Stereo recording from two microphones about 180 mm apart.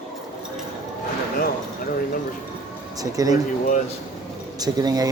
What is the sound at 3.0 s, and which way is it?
Speech, 20° right (ahead or behind).